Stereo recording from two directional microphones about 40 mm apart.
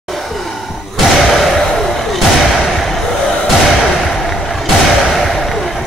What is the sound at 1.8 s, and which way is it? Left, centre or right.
Slam, centre.